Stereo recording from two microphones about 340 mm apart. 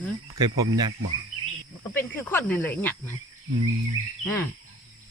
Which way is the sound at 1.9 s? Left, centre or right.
Centre.